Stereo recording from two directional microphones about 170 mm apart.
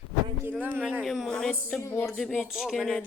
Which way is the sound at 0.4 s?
10° right (ahead or behind).